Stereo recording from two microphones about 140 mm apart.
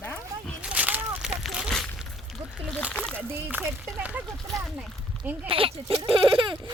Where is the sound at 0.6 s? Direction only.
10° right (ahead or behind).